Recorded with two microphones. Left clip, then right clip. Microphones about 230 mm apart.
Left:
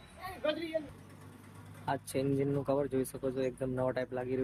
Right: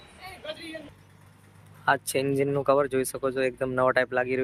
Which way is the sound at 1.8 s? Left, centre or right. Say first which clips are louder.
Right 10 dB; centre.